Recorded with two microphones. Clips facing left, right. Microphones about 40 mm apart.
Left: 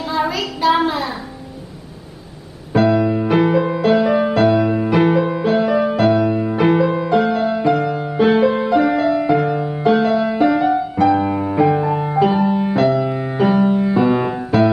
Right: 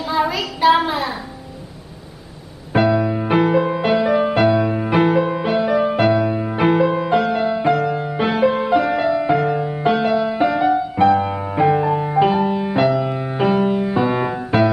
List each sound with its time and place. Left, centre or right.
0.0 s child singing: centre
0.6 s a sound: centre
2.9 s music: centre
4.7 s music: right
5.0 s music: centre
8.6 s music: centre
9.8 s music: centre
10.1 s music: centre
14.5 s music: right